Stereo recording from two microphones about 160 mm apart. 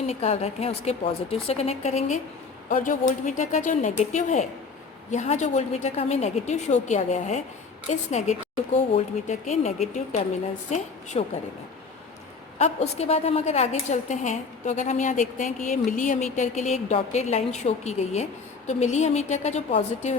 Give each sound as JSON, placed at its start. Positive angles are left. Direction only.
{"t": 0.1, "sound": "a woman's voice", "side_deg": 40}
{"t": 12.5, "sound": "a woman's voice", "side_deg": 45}